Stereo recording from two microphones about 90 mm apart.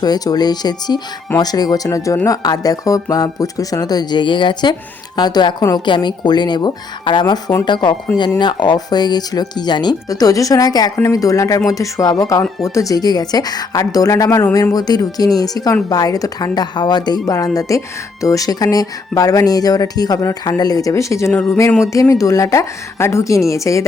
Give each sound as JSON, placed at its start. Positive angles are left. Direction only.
{"t": 0.0, "sound": "speech", "side_deg": 50}
{"t": 5.1, "sound": "a woman's voice", "side_deg": 50}